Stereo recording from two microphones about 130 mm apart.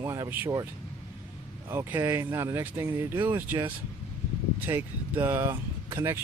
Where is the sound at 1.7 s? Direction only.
20° right (ahead or behind).